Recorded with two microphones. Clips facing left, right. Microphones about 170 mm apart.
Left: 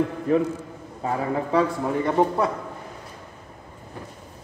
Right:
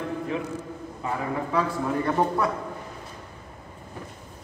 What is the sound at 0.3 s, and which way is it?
Speech, 45° left (ahead or behind).